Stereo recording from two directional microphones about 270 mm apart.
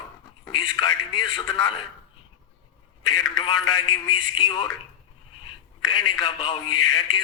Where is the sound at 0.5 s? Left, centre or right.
Centre.